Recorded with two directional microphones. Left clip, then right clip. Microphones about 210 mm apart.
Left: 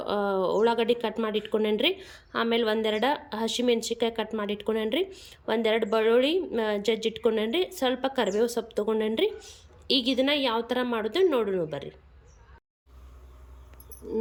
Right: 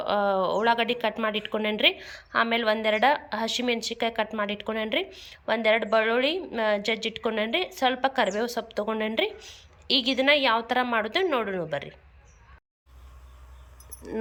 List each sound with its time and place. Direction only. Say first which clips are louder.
0.0 s speech: right 3 dB; 10° left (ahead or behind)